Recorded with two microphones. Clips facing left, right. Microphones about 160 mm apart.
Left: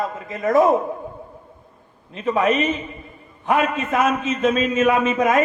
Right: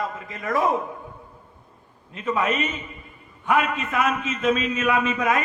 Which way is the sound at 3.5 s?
40° left (ahead or behind).